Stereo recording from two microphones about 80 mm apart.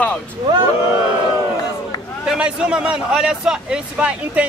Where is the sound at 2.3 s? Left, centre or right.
Centre.